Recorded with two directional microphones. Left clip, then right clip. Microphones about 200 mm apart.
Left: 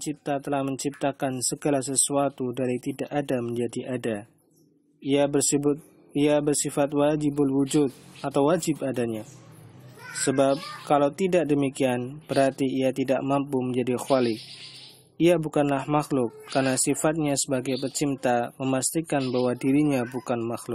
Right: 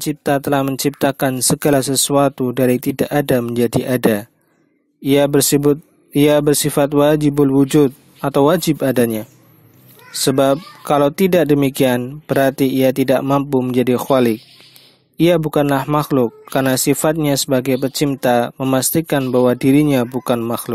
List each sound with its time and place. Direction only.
0.0 s speech: 40° right (ahead or behind)
10.2 s speech: 40° right (ahead or behind)